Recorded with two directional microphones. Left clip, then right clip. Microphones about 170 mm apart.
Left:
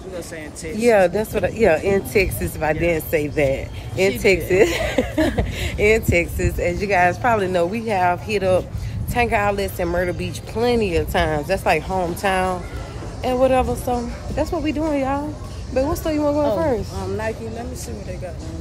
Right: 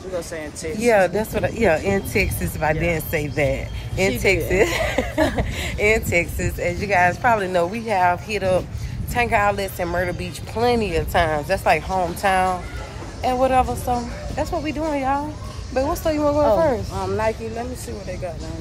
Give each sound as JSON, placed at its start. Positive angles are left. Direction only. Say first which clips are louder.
{"t": 0.7, "sound": "speech", "louder": "left 2 dB", "side_deg": 20}